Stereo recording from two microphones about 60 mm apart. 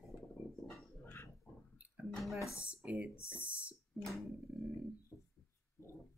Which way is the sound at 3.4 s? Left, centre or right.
Right.